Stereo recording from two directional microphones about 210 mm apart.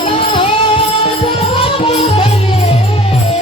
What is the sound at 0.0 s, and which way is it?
Music, 25° left (ahead or behind).